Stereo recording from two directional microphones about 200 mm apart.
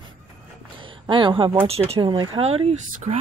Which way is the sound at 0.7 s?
25° right (ahead or behind).